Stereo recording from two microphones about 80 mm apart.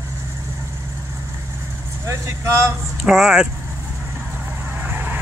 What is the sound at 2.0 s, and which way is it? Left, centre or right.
Speech, right.